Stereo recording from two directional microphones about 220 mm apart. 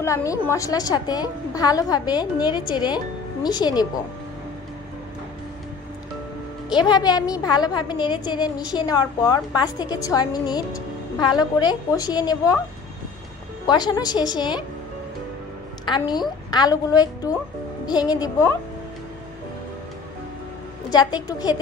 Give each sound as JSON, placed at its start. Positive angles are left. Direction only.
{"t": 0.0, "sound": "a woman's voice", "side_deg": 15}
{"t": 6.7, "sound": "a woman's voice", "side_deg": 20}
{"t": 13.7, "sound": "a woman's voice", "side_deg": 20}
{"t": 16.0, "sound": "a woman's voice", "side_deg": 20}
{"t": 20.9, "sound": "a woman's voice", "side_deg": 20}